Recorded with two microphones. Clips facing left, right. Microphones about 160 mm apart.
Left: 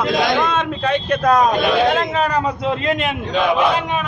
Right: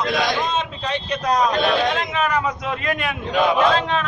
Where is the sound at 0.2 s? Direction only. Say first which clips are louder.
Left 4 dB; 55° left (ahead or behind).